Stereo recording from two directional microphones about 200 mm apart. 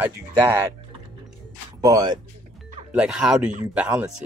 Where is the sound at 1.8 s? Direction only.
20° right (ahead or behind).